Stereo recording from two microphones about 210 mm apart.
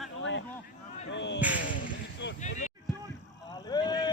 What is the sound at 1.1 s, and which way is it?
Whip, 55° left (ahead or behind).